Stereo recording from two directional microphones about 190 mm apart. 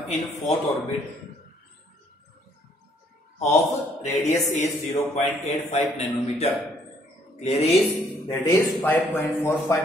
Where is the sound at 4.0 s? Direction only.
35° left (ahead or behind).